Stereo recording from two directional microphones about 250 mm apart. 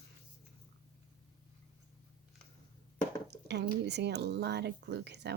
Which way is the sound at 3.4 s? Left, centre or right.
Right.